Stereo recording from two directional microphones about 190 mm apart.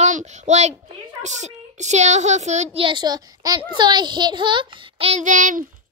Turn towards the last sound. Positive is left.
turn(degrees=-40)  # may be behind; listen again after turning